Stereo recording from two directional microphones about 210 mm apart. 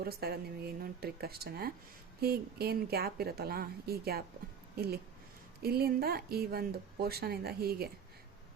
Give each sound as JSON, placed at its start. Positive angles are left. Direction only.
{"t": 0.0, "sound": "speech", "side_deg": -45}